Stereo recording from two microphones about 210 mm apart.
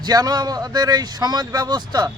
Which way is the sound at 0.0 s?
20° right (ahead or behind).